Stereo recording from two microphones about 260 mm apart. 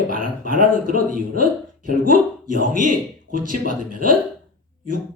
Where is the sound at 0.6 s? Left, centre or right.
Right.